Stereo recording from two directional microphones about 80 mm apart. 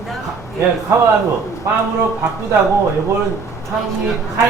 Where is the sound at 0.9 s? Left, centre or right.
Right.